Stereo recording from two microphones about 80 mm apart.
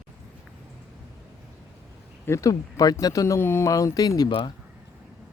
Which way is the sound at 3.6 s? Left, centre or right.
Left.